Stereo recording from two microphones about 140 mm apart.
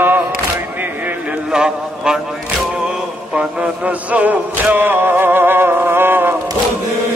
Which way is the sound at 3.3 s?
5° right (ahead or behind).